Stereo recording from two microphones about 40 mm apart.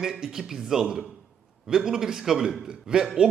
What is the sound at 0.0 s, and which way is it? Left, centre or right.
A man's voice, centre.